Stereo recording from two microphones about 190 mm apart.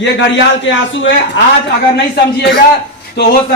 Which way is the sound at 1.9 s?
60° left (ahead or behind).